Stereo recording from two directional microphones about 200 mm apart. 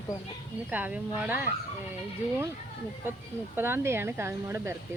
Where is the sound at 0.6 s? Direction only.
10° right (ahead or behind).